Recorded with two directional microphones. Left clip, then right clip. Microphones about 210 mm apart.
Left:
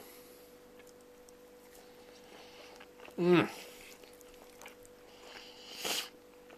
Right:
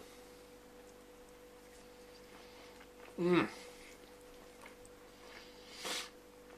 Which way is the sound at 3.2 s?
45° left (ahead or behind).